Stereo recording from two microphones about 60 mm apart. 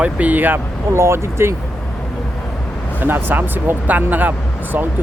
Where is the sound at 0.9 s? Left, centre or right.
Right.